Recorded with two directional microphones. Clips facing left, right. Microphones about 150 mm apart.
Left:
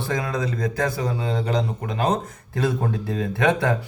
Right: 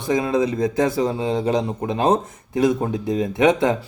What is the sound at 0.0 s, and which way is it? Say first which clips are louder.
Speech: right 6 dB; 20° right (ahead or behind).